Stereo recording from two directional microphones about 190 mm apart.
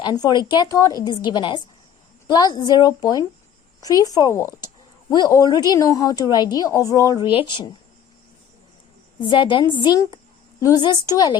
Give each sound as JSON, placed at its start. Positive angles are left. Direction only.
{"t": 0.0, "sound": "speech", "side_deg": 20}
{"t": 9.2, "sound": "speech", "side_deg": 25}